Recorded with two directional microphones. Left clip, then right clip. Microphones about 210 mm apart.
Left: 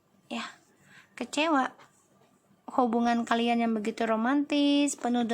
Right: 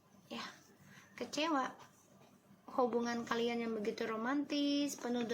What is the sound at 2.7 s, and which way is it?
A woman's voice, 50° left (ahead or behind).